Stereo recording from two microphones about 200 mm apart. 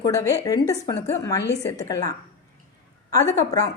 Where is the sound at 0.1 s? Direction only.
15° left (ahead or behind).